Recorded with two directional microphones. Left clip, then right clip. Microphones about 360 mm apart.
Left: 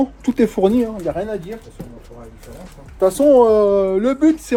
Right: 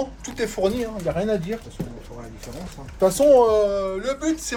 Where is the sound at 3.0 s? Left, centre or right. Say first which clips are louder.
Left 3 dB; centre.